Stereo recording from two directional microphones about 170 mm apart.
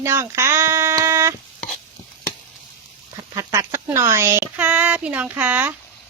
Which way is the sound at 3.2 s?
20° right (ahead or behind).